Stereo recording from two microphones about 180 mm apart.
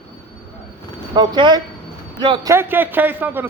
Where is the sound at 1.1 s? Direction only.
25° right (ahead or behind).